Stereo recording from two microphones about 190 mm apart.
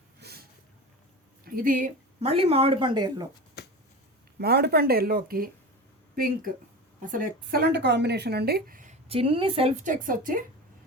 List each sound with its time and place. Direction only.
0.2 s a sound: 60° right (ahead or behind)
1.5 s speech: 50° right (ahead or behind)
2.2 s speech: 30° right (ahead or behind)
3.6 s a sound: 60° left (ahead or behind)
4.4 s speech: 60° right (ahead or behind)
9.0 s a woman's voice: 30° right (ahead or behind); by 10.4 s 45° right (ahead or behind)